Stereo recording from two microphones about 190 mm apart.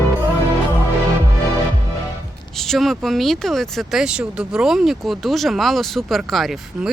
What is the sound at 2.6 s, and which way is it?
Speech, centre (ahead or behind).